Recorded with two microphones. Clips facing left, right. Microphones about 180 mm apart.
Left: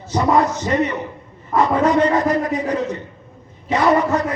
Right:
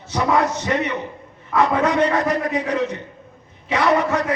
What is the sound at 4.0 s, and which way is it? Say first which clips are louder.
Music: left 2 dB; 65° right (ahead or behind).